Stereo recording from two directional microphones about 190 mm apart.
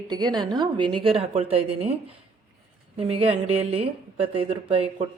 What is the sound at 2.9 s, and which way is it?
Speech, 30° right (ahead or behind).